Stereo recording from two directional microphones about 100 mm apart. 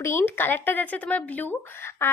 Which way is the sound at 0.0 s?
25° left (ahead or behind).